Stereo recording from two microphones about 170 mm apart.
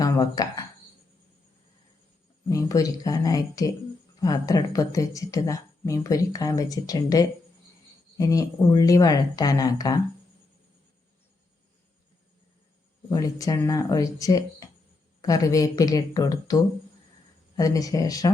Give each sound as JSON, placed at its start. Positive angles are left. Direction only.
{"t": 0.0, "sound": "a sound", "side_deg": 20}
{"t": 2.5, "sound": "a woman's voice", "side_deg": 20}
{"t": 13.1, "sound": "a woman's voice", "side_deg": 20}
{"t": 17.6, "sound": "a woman's voice", "side_deg": 20}